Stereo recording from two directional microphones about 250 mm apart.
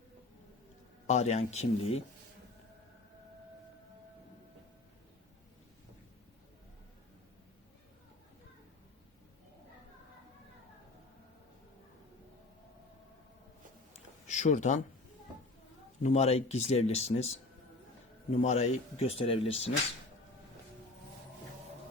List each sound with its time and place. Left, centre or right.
1.0 s a man's voice: left
13.9 s a sound: left
16.0 s a man's voice: left